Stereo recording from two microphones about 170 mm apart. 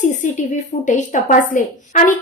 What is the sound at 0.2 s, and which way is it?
A woman's voice, 50° left (ahead or behind).